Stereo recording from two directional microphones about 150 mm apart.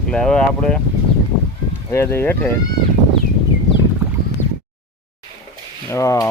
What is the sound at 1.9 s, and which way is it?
Speech, 15° left (ahead or behind).